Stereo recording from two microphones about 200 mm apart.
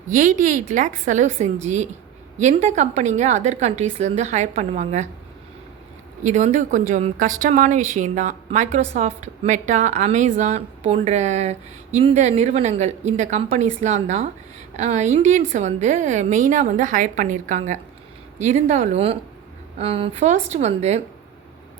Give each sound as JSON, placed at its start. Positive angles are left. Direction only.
{"t": 0.1, "sound": "a woman's voice", "side_deg": -40}
{"t": 6.2, "sound": "a woman's voice", "side_deg": -35}